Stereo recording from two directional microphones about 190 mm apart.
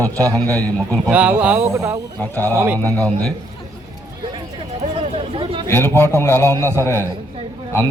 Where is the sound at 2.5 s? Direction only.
15° right (ahead or behind).